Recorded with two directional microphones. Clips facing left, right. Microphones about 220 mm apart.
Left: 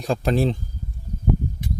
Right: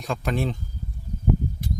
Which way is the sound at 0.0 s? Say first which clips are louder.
Left 5 dB; 35° left (ahead or behind).